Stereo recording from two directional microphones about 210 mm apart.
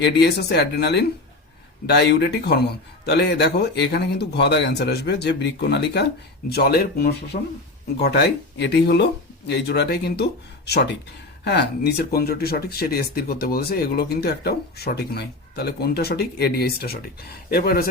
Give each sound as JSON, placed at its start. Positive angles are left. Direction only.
{"t": 0.0, "sound": "speech", "side_deg": 50}
{"t": 8.0, "sound": "speech", "side_deg": 50}
{"t": 11.4, "sound": "speech", "side_deg": 50}